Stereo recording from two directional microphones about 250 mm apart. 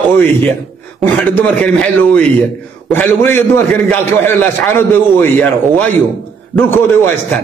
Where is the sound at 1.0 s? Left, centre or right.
Centre.